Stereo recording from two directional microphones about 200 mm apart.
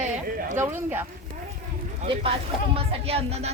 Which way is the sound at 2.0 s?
25° right (ahead or behind).